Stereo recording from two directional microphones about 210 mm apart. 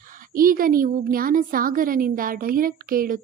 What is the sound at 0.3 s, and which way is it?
A woman's voice, 45° right (ahead or behind).